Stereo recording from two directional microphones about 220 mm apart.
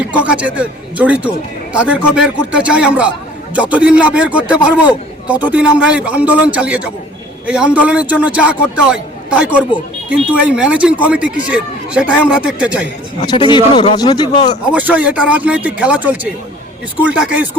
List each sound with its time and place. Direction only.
0.0 s a man's voice: 5° right (ahead or behind)
13.2 s speech: 20° left (ahead or behind)
14.7 s a man's voice: 5° right (ahead or behind)